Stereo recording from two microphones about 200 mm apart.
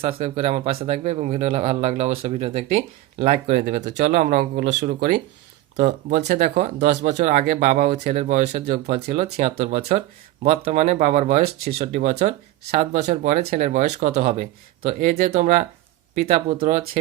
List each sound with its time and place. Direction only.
0.2 s speech: 30° right (ahead or behind)
3.8 s speech: 50° right (ahead or behind)
7.9 s speech: 50° right (ahead or behind)
8.2 s speech: 35° right (ahead or behind)